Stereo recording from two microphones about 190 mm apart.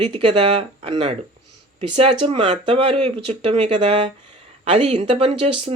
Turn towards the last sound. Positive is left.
turn(degrees=-25)  # may be behind; listen again after turning